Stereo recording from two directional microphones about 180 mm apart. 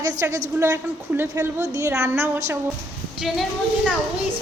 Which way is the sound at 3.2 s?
Centre (ahead or behind).